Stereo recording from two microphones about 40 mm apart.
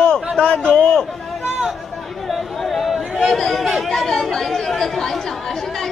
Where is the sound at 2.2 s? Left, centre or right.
Centre.